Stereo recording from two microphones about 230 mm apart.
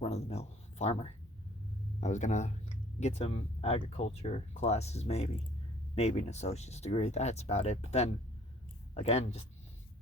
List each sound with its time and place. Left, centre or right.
0.0 s speech: left